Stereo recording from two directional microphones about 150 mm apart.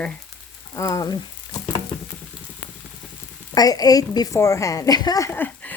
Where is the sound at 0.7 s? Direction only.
20° left (ahead or behind).